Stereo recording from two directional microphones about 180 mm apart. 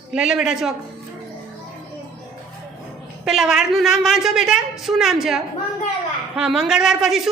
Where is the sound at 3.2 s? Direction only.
Centre (ahead or behind).